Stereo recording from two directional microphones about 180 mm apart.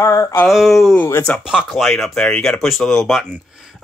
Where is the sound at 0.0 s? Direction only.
20° left (ahead or behind).